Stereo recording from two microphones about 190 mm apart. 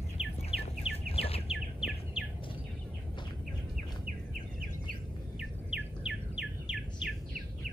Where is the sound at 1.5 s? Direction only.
5° right (ahead or behind).